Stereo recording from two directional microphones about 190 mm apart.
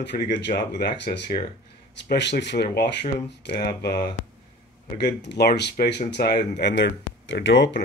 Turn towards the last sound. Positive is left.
turn(degrees=70)  # may be behind; listen again after turning